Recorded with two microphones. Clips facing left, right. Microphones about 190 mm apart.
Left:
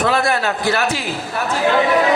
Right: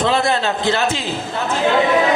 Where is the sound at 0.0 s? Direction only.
20° right (ahead or behind).